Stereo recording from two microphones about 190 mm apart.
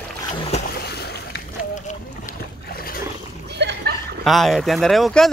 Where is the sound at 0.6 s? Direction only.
55° left (ahead or behind).